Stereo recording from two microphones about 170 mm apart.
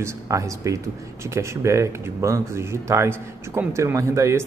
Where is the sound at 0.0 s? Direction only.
20° right (ahead or behind).